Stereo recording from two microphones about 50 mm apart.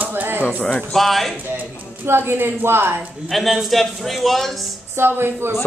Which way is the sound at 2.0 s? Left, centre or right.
Right.